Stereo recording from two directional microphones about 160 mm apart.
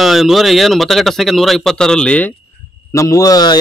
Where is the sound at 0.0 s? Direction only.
Centre (ahead or behind).